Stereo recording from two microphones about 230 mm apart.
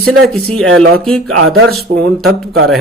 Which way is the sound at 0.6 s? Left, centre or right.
Right.